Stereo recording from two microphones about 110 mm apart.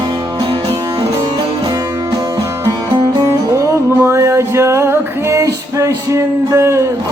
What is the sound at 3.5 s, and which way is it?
Music, 25° right (ahead or behind).